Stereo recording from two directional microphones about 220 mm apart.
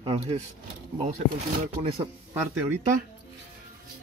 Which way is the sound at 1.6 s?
25° right (ahead or behind).